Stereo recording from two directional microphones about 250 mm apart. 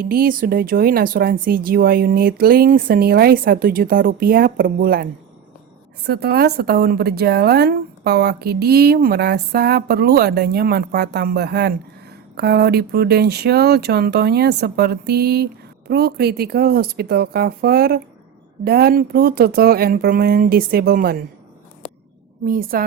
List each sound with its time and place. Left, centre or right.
0.0 s a woman's voice: right
6.1 s a woman's voice: right
22.4 s a woman's voice: right